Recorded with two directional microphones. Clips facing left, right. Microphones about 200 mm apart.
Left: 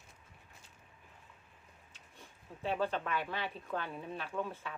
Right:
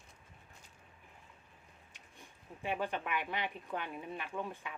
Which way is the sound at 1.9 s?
15° right (ahead or behind).